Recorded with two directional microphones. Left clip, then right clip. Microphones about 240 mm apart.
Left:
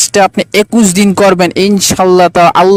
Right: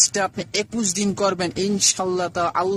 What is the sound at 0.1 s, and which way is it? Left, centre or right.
Speech, left.